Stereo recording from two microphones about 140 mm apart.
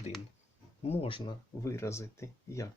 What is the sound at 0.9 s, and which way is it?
Speech, 40° left (ahead or behind).